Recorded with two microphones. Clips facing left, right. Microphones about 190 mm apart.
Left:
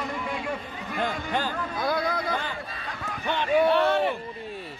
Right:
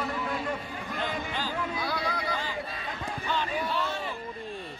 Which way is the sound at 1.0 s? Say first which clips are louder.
Left 6 dB; 55° left (ahead or behind).